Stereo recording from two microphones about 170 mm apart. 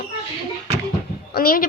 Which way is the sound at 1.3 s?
60° left (ahead or behind).